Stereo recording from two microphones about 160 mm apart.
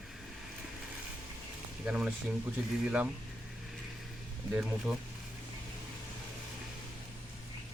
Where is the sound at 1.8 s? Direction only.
5° right (ahead or behind).